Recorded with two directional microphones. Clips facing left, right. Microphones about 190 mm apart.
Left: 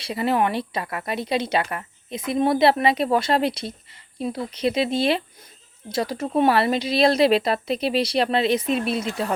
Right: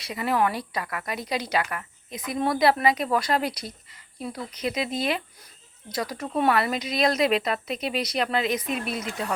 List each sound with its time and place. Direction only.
0.0 s speech: 30° left (ahead or behind)